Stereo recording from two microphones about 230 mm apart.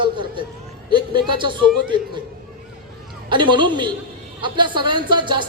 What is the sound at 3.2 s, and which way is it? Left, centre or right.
A man's voice, right.